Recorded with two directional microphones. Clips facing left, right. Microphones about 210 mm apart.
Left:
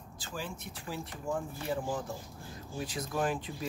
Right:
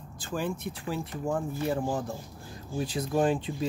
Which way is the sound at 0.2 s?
55° right (ahead or behind).